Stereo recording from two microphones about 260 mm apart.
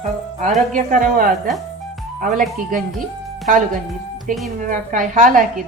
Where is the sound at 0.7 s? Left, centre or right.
Right.